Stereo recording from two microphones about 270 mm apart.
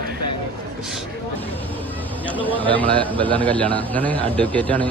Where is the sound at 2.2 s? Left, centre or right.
Centre.